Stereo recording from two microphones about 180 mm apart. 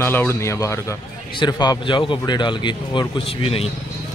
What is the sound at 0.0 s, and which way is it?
A man's voice, 10° left (ahead or behind).